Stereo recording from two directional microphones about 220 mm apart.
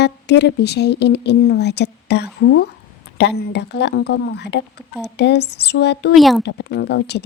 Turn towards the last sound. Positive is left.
turn(degrees=50)  # may be behind; listen again after turning